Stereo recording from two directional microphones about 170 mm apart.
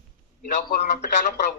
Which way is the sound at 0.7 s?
70° left (ahead or behind).